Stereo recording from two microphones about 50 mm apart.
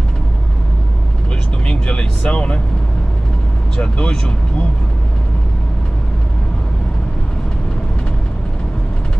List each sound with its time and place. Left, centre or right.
1.7 s vehicle: centre
3.7 s speech: centre